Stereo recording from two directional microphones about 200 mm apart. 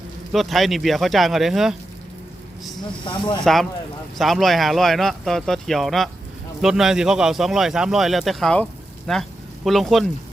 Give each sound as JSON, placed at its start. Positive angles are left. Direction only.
{"t": 0.3, "sound": "a man's voice", "side_deg": 0}
{"t": 3.0, "sound": "speech", "side_deg": 25}
{"t": 3.4, "sound": "a man's voice", "side_deg": 0}